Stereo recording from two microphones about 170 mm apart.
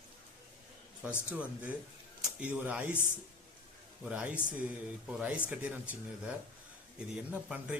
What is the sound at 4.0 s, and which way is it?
A man's voice, 5° right (ahead or behind).